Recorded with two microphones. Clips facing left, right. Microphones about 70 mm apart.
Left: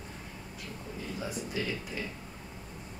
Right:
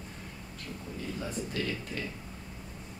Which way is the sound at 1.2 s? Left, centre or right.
Centre.